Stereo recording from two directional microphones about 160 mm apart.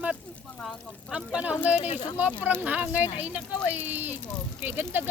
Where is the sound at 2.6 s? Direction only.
10° right (ahead or behind).